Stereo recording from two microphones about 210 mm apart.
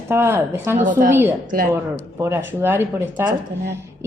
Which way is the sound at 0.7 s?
35° right (ahead or behind).